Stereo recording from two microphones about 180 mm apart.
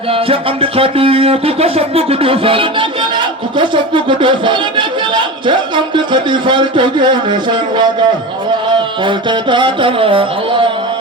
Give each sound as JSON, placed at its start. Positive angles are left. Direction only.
{"t": 0.1, "sound": "music", "side_deg": -30}
{"t": 3.6, "sound": "speech", "side_deg": -25}
{"t": 8.7, "sound": "a sound", "side_deg": -25}